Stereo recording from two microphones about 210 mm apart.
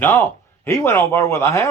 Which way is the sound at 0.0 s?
10° left (ahead or behind).